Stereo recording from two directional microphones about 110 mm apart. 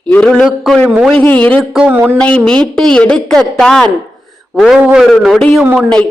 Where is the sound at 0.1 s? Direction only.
5° left (ahead or behind).